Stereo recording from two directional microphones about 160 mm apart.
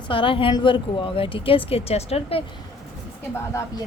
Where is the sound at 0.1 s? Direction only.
35° left (ahead or behind).